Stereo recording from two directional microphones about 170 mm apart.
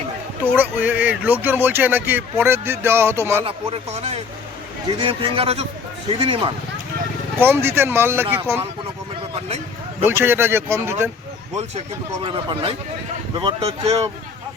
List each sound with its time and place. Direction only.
0.4 s speech: 10° right (ahead or behind)
3.4 s speech: 35° right (ahead or behind)
7.3 s speech: 15° right (ahead or behind)
10.0 s speech: 15° right (ahead or behind)
12.2 s speech: 30° right (ahead or behind)